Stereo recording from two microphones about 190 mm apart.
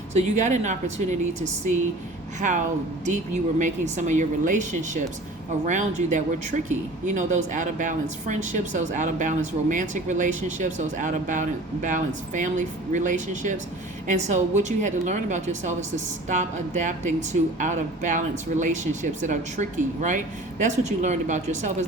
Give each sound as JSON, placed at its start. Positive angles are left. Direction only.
{"t": 0.1, "sound": "speech", "side_deg": -40}